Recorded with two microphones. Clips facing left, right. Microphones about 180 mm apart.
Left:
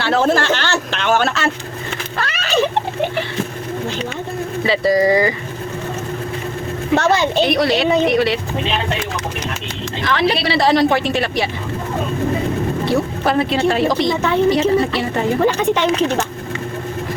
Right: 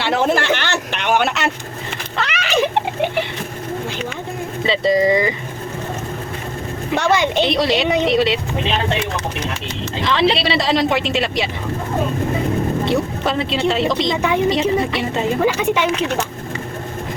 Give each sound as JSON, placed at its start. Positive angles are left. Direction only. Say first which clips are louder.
{"t": 0.0, "sound": "a sound", "louder": "left 2 dB", "side_deg": -20}
{"t": 4.6, "sound": "speech", "louder": "left 1 dB", "side_deg": -20}
{"t": 6.9, "sound": "speech", "louder": "left 2 dB", "side_deg": -15}
{"t": 10.0, "sound": "speech", "louder": "right 1 dB", "side_deg": -25}
{"t": 12.8, "sound": "speech", "louder": "left 1 dB", "side_deg": -20}
{"t": 15.4, "sound": "speech", "louder": "left 1 dB", "side_deg": -10}